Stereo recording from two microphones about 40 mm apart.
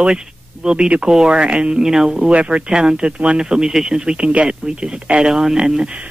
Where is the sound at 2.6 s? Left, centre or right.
Centre.